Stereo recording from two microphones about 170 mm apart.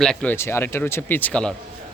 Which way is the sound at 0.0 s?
5° left (ahead or behind).